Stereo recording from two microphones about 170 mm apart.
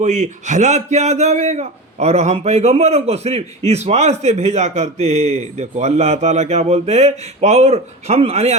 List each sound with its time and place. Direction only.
0.0 s a man's voice: 45° right (ahead or behind)